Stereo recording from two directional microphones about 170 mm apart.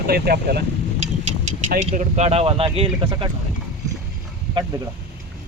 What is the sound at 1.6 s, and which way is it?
Speech, 50° right (ahead or behind).